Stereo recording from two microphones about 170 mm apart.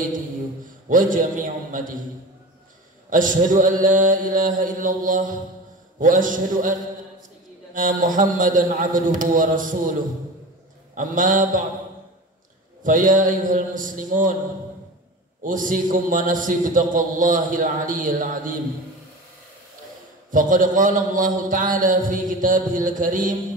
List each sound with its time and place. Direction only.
0.8 s a man's voice: 50° right (ahead or behind)
3.1 s a man's voice: 50° right (ahead or behind)
11.0 s a man's voice: 50° right (ahead or behind)
12.8 s a man's voice: 50° right (ahead or behind)
15.4 s a man's voice: 50° right (ahead or behind)
20.2 s a man's voice: 50° right (ahead or behind)